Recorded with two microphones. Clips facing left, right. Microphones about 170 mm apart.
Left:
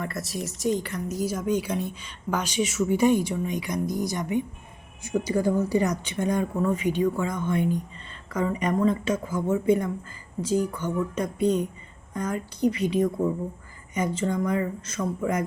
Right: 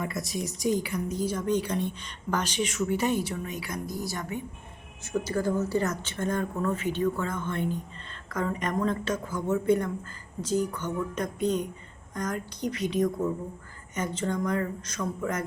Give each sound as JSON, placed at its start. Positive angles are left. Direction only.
{"t": 0.1, "sound": "speech", "side_deg": 0}